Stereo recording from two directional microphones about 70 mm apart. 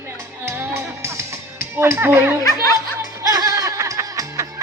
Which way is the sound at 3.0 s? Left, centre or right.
Right.